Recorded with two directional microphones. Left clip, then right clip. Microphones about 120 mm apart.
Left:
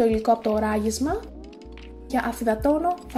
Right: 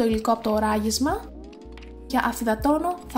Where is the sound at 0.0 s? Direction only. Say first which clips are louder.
Left 2 dB; 15° right (ahead or behind).